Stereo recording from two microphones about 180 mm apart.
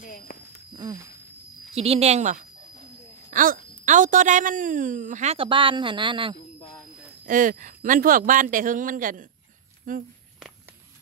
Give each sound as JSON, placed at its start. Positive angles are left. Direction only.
{"t": 0.0, "sound": "a sound", "side_deg": 50}
{"t": 1.7, "sound": "a woman's voice", "side_deg": -35}
{"t": 7.2, "sound": "a woman's voice", "side_deg": -50}